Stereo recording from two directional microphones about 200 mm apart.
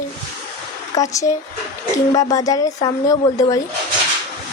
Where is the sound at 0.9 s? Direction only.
15° left (ahead or behind).